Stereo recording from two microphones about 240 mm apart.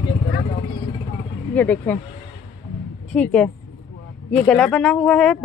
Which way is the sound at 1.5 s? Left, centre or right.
Centre.